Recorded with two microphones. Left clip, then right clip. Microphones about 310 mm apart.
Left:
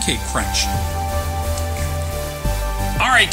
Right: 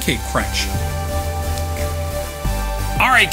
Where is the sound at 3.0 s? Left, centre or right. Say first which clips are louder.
Right 1 dB; right.